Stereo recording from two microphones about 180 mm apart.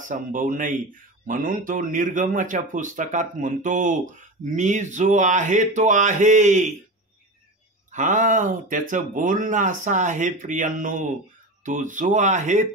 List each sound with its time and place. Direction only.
0.0 s speech: 50° right (ahead or behind)
7.9 s speech: 45° right (ahead or behind)